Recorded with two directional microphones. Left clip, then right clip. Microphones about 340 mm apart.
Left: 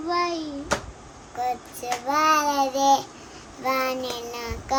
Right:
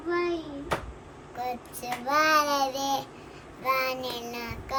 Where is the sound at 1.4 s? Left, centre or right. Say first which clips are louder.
Left 6 dB; centre.